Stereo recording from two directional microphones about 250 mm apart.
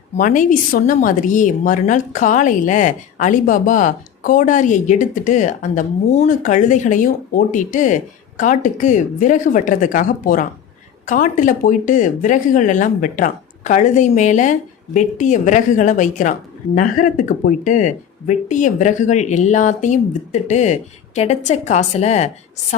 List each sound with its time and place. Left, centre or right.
0.2 s a woman's voice: left